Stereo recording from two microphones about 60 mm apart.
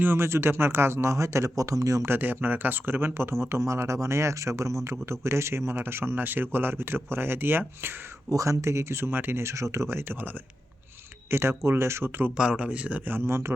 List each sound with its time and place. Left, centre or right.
0.0 s speech: right
2.0 s speech: right
3.6 s speech: right
8.3 s speech: right
9.4 s speech: right
11.3 s speech: right
12.4 s speech: centre
13.2 s speech: right